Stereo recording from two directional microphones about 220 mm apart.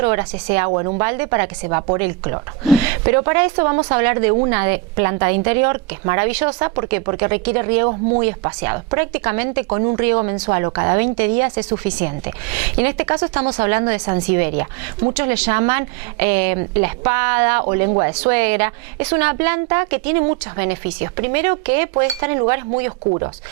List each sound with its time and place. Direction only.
0.0 s a woman's voice: 15° right (ahead or behind)
0.7 s a woman's voice: 25° right (ahead or behind)